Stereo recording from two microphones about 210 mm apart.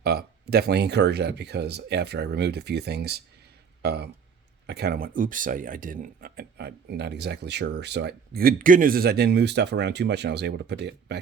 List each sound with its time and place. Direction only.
0.0 s speech: 50° right (ahead or behind)